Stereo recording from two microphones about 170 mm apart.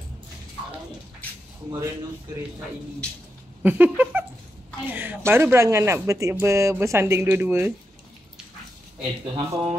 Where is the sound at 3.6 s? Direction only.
10° right (ahead or behind).